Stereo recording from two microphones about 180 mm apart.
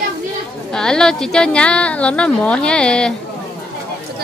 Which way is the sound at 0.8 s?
5° left (ahead or behind).